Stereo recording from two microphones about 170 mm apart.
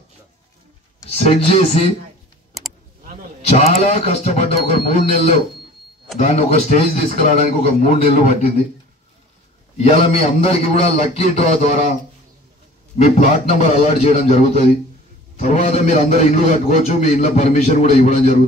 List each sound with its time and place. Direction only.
1.1 s a man's voice: 40° left (ahead or behind)
3.5 s a man's voice: 40° left (ahead or behind)
9.8 s a man's voice: 35° left (ahead or behind)
13.0 s a man's voice: 45° left (ahead or behind)